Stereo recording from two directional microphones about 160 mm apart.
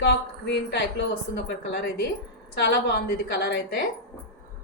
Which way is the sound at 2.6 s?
90° left.